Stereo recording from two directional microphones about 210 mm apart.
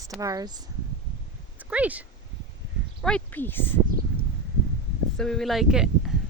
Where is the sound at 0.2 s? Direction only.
15° right (ahead or behind).